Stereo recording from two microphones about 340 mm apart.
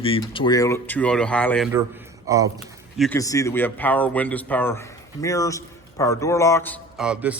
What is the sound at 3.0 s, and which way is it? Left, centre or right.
A man's voice, centre.